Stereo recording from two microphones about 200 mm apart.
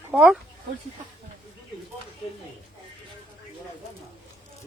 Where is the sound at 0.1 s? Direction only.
5° right (ahead or behind).